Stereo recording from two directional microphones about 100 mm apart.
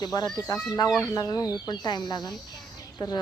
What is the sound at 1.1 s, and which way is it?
Speech, 40° left (ahead or behind).